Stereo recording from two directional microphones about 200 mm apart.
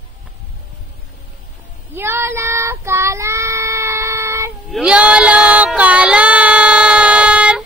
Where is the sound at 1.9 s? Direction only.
10° right (ahead or behind).